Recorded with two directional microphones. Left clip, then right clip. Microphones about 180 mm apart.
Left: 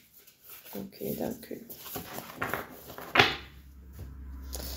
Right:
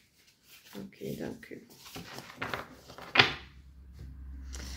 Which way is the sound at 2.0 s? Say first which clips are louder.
Left 3 dB; 30° left (ahead or behind).